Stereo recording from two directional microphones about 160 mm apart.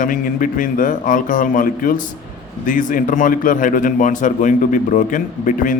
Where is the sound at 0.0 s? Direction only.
55° left (ahead or behind).